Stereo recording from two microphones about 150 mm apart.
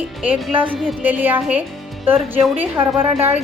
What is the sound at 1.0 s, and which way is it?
Speech, 10° right (ahead or behind).